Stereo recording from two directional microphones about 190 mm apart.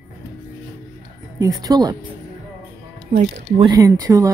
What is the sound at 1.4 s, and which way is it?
Speech, 20° right (ahead or behind).